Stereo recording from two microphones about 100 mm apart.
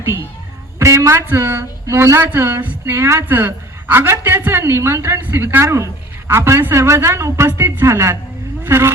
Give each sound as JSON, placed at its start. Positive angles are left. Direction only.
{"t": 0.8, "sound": "speech", "side_deg": -30}